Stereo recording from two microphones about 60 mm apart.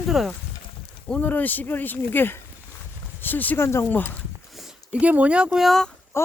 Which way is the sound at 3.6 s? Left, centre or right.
Left.